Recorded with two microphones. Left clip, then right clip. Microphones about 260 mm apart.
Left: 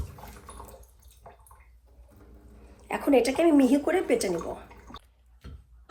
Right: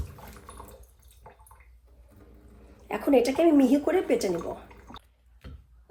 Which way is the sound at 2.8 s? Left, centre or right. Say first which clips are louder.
Even; left.